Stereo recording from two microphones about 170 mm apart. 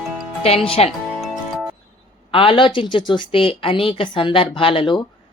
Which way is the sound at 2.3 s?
30° left (ahead or behind).